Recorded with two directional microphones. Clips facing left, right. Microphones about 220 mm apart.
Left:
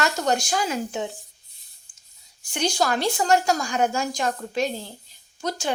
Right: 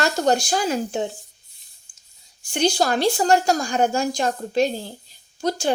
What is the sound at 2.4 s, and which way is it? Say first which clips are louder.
A woman's voice: right 4 dB; 30° right (ahead or behind).